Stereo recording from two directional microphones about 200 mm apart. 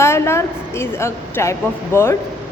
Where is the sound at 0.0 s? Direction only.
15° left (ahead or behind).